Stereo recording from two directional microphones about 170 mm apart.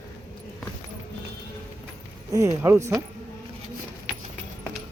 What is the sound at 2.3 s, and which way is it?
Speech, 20° right (ahead or behind).